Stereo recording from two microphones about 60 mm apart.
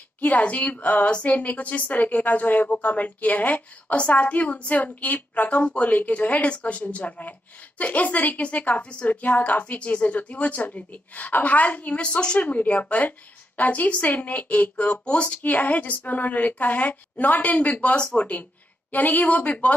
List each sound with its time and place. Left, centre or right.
0.2 s a woman's voice: left